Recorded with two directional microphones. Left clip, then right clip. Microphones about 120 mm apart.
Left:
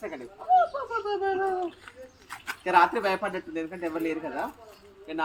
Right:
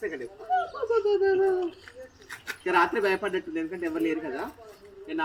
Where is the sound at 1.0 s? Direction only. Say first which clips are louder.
Right 4 dB; 30° left (ahead or behind).